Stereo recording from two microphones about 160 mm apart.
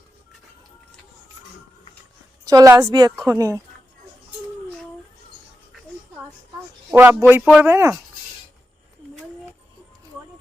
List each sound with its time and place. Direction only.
2.4 s a woman's voice: 25° right (ahead or behind)
6.9 s speech: 10° right (ahead or behind)